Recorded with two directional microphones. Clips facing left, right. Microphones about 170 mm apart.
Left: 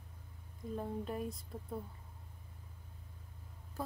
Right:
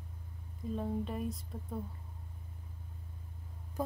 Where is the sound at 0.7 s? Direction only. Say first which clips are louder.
Right 3 dB; centre (ahead or behind).